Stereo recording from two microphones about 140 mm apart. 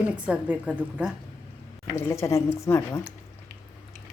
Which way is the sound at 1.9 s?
20° left (ahead or behind).